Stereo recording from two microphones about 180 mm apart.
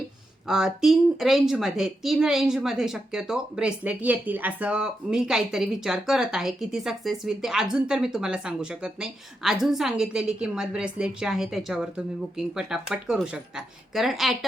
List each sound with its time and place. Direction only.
0.4 s a woman's voice: centre (ahead or behind)